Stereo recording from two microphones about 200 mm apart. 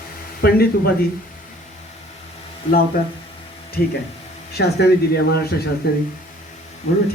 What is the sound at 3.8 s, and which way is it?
Speech, 50° left (ahead or behind).